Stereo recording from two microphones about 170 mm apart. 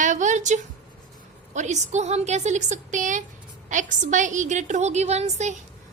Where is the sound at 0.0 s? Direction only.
45° right (ahead or behind).